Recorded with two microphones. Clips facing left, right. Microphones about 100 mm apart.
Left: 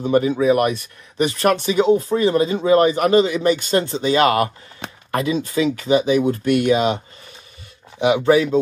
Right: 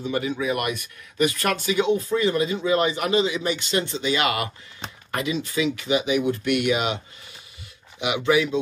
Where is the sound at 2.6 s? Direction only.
45° left (ahead or behind).